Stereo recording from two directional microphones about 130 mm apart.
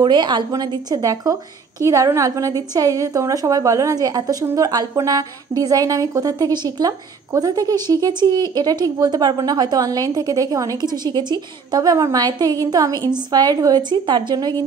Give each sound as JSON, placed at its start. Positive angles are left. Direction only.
{"t": 0.0, "sound": "a woman's voice", "side_deg": -35}